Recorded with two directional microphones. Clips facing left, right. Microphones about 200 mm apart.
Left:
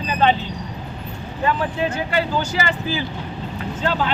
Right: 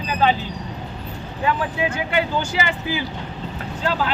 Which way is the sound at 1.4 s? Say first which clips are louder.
Left 1 dB; 15° right (ahead or behind).